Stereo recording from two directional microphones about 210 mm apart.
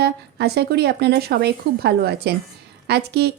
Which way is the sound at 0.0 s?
50° right (ahead or behind).